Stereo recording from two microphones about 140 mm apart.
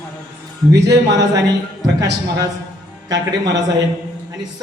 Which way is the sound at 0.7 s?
25° right (ahead or behind).